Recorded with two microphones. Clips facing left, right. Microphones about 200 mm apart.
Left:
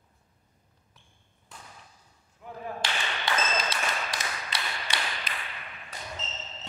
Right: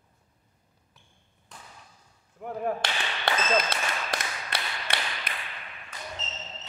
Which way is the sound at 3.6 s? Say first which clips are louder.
Right 3 dB; 60° right (ahead or behind).